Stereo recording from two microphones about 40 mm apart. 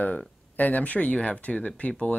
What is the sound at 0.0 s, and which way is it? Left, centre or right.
Speech, left.